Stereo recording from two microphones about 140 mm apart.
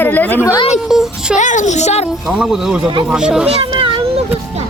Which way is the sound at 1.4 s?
60° left (ahead or behind).